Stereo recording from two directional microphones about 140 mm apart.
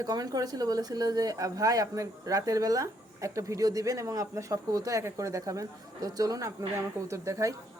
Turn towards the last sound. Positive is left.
turn(degrees=-20)  # may be behind; listen again after turning